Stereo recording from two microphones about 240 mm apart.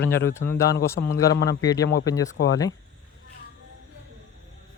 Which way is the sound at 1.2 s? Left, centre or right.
Left.